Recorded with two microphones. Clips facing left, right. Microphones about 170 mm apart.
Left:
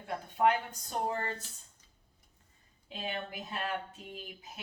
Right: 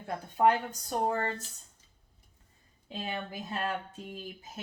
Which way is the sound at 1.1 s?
35° right (ahead or behind).